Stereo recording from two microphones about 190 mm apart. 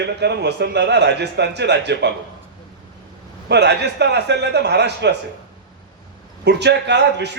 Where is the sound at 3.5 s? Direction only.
65° right (ahead or behind).